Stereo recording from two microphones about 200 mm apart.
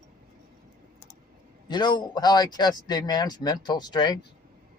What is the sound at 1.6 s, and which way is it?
Speech, 20° left (ahead or behind).